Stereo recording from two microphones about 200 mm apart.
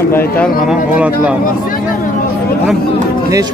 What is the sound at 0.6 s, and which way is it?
Speech, 5° right (ahead or behind).